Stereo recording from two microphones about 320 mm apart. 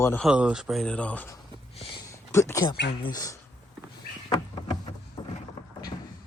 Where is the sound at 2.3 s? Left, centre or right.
Centre.